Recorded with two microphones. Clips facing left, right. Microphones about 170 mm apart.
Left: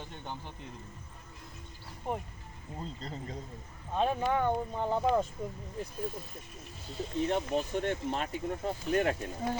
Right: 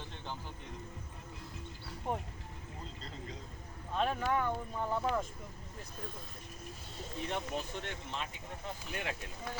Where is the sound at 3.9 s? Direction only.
20° left (ahead or behind); by 5.2 s 35° left (ahead or behind).